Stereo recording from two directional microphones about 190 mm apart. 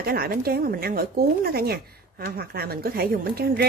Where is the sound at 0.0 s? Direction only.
50° right (ahead or behind).